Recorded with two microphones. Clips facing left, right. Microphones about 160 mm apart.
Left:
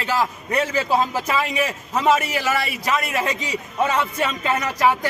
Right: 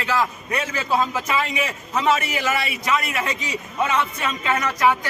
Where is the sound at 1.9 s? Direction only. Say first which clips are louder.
Left 2 dB; 40° left (ahead or behind).